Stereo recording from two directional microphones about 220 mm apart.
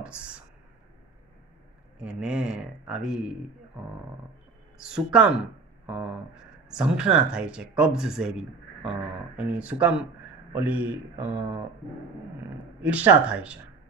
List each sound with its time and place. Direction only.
0.0 s a sound: 5° right (ahead or behind)
2.0 s a man's voice: 5° right (ahead or behind)
4.7 s speech: 5° right (ahead or behind)
6.7 s speech: 5° right (ahead or behind)
12.8 s speech: 5° right (ahead or behind)